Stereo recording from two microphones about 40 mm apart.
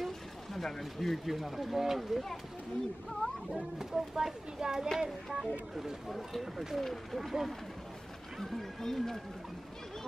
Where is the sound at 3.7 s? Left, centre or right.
Centre.